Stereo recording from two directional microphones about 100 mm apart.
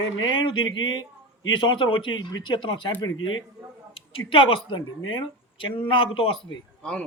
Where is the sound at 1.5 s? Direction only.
55° left (ahead or behind).